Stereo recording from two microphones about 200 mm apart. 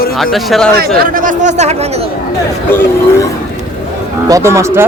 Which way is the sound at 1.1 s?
40° right (ahead or behind).